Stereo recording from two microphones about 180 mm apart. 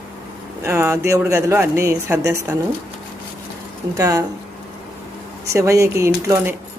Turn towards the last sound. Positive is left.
turn(degrees=-15)  # may be behind; listen again after turning